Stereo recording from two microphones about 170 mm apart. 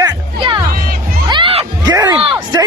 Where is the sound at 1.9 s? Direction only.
20° right (ahead or behind).